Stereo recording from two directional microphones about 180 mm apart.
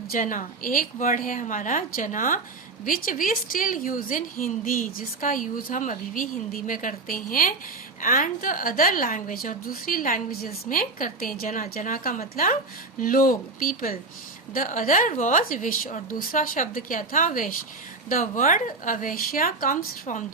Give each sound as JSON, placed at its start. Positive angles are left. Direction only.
{"t": 0.1, "sound": "a woman's voice", "side_deg": 45}